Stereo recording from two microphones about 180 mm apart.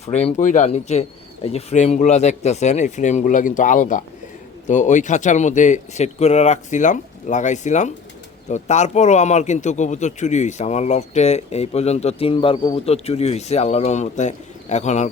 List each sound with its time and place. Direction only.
0.0 s speech: 35° left (ahead or behind)